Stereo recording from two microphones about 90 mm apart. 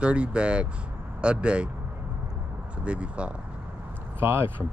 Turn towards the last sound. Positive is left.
turn(degrees=-25)  # may be behind; listen again after turning